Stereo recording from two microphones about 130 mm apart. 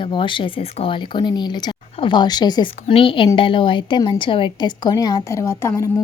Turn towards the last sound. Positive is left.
turn(degrees=20)  # may be behind; listen again after turning